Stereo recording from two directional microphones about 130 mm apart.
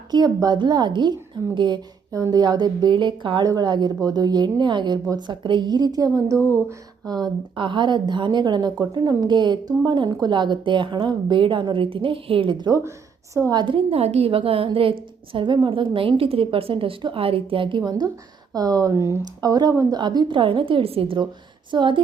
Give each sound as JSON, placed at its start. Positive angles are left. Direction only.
{"t": 0.1, "sound": "a woman's voice", "side_deg": -30}
{"t": 6.5, "sound": "a sound", "side_deg": -15}
{"t": 7.1, "sound": "a woman's voice", "side_deg": -35}
{"t": 20.0, "sound": "a woman's voice", "side_deg": -35}